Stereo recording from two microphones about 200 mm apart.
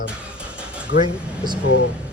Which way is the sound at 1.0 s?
20° right (ahead or behind).